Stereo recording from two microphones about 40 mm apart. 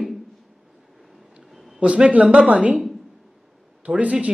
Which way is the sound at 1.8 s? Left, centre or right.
Right.